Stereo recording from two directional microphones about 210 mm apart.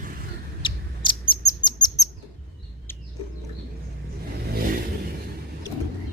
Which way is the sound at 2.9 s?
10° left (ahead or behind).